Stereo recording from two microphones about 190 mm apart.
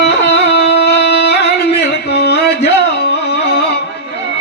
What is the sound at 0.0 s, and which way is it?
Singing, 60° left (ahead or behind).